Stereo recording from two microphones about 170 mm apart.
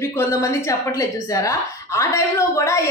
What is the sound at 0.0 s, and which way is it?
A woman's voice, 15° left (ahead or behind).